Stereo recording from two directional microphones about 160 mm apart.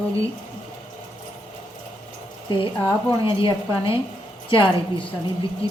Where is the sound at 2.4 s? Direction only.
30° left (ahead or behind).